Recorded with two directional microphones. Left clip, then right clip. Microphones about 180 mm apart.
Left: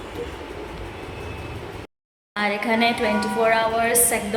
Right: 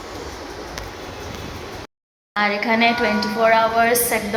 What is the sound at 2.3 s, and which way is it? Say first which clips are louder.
A woman's voice: right 3 dB; 10° left (ahead or behind).